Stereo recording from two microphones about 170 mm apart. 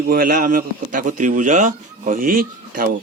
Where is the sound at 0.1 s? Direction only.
60° right (ahead or behind).